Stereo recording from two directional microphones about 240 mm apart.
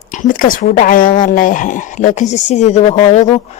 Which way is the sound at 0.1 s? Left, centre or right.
Left.